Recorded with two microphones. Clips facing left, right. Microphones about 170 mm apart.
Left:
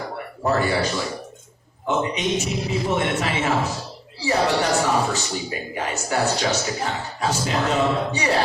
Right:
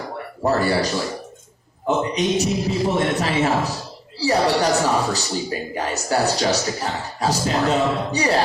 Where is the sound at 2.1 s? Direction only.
35° right (ahead or behind).